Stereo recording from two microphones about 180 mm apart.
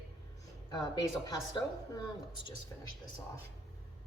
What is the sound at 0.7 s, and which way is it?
Speech, 20° left (ahead or behind).